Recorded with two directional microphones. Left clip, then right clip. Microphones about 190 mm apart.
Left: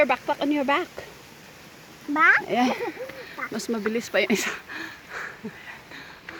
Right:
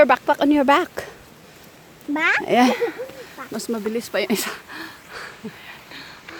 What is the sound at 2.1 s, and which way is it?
Speech, 20° right (ahead or behind).